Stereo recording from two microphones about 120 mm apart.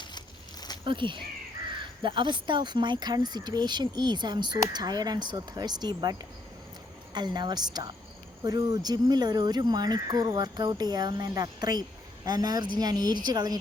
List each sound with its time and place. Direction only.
0.9 s speech: 45° right (ahead or behind)